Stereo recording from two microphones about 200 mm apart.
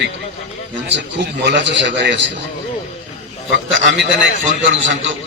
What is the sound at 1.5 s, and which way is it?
Speech, 60° right (ahead or behind).